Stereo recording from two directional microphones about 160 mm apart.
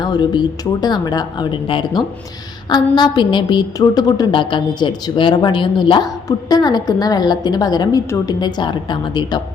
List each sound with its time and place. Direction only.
0.0 s a woman's voice: 25° left (ahead or behind)